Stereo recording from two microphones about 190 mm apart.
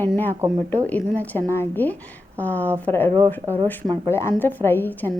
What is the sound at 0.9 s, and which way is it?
A woman's voice, 10° left (ahead or behind).